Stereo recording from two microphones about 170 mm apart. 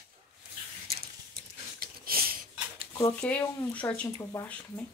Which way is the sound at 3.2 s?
10° left (ahead or behind).